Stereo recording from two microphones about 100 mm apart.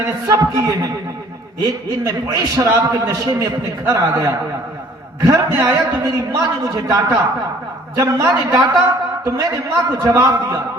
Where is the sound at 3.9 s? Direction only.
35° right (ahead or behind).